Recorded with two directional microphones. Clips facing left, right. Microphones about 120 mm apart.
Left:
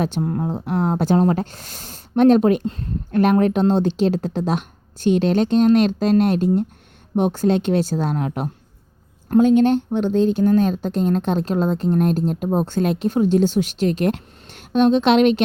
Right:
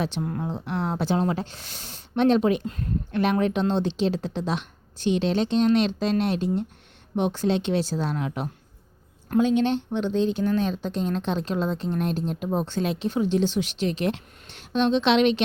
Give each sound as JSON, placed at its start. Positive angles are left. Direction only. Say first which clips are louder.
{"t": 0.0, "sound": "speech", "louder": "left 6 dB", "side_deg": 40}
{"t": 2.6, "sound": "speech", "louder": "left 5 dB", "side_deg": 30}
{"t": 3.1, "sound": "speech", "louder": "left 7 dB", "side_deg": 45}